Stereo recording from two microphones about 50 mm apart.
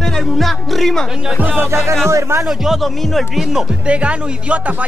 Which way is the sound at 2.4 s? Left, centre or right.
Centre.